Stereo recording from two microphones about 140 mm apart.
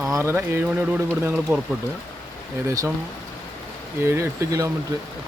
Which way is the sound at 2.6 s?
20° right (ahead or behind).